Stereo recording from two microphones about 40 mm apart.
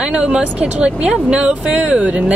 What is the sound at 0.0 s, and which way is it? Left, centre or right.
Speech, right.